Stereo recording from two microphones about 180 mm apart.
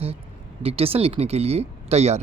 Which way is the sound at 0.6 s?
35° right (ahead or behind).